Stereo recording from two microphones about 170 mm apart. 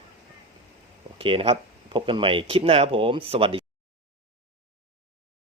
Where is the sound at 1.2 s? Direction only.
30° right (ahead or behind).